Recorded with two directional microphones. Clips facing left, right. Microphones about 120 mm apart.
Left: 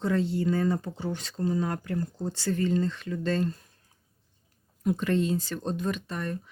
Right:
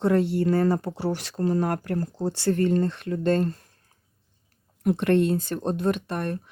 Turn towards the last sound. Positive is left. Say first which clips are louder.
# right 5 dB
turn(degrees=-60)  # may be behind; listen again after turning